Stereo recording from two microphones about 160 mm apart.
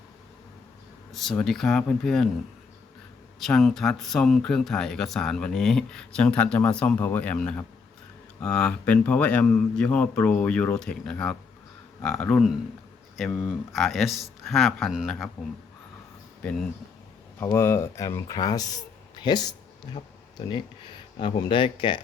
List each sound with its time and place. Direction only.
1.1 s speech: centre (ahead or behind)
3.4 s speech: centre (ahead or behind)
13.1 s speech: centre (ahead or behind)
17.4 s speech: 15° left (ahead or behind)
21.2 s speech: 30° left (ahead or behind)